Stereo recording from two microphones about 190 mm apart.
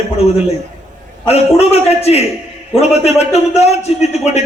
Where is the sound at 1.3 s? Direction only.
35° left (ahead or behind).